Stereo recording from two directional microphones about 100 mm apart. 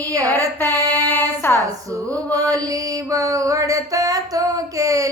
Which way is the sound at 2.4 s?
35° right (ahead or behind).